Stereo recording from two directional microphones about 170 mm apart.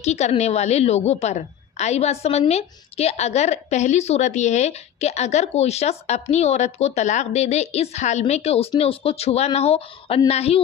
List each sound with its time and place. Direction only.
0.0 s a woman's voice: 40° left (ahead or behind)